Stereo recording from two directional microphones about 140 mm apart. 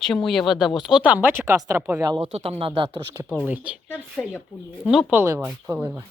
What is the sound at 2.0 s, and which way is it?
Speech, 30° right (ahead or behind).